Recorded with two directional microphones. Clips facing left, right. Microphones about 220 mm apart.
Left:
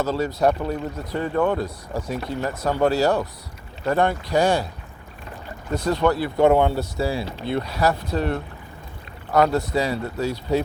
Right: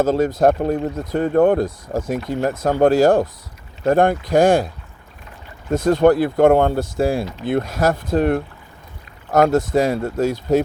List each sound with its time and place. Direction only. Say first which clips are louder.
0.0 s speech: right 5 dB; 50° right (ahead or behind)
5.7 s speech: right 7 dB; 50° right (ahead or behind)